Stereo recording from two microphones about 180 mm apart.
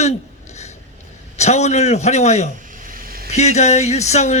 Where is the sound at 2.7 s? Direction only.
50° right (ahead or behind).